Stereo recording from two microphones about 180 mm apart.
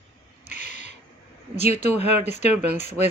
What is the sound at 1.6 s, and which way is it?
Speech, 35° left (ahead or behind).